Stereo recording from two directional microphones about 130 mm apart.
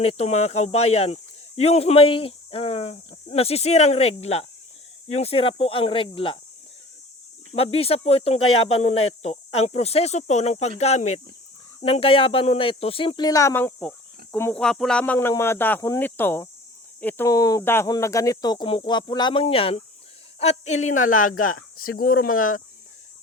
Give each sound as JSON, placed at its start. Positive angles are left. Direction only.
{"t": 0.0, "sound": "speech", "side_deg": 55}
{"t": 7.5, "sound": "speech", "side_deg": 50}
{"t": 14.5, "sound": "speech", "side_deg": 5}
{"t": 17.2, "sound": "speech", "side_deg": 25}
{"t": 20.4, "sound": "speech", "side_deg": 55}